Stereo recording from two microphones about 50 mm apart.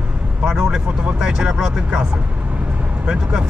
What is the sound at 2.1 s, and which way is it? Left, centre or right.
Vehicle, right.